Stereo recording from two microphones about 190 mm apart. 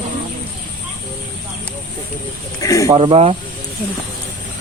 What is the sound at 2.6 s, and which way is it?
Speech, 15° left (ahead or behind).